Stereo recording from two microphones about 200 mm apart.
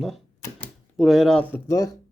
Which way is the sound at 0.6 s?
Centre (ahead or behind).